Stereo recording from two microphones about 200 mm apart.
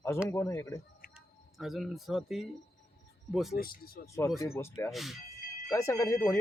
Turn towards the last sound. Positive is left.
turn(degrees=10)  # may be behind; listen again after turning